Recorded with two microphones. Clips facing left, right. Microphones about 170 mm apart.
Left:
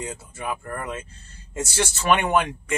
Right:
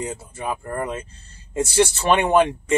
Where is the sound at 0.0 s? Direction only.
25° right (ahead or behind).